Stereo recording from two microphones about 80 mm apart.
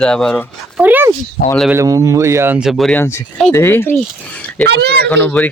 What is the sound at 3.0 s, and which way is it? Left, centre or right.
Speech, left.